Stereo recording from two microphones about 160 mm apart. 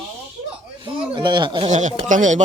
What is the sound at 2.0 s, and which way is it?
Speech, 50° right (ahead or behind).